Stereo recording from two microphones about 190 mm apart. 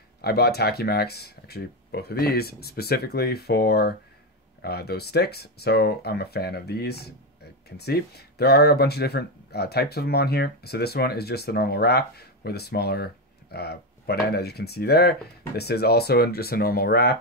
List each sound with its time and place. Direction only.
0.2 s speech: 55° left (ahead or behind)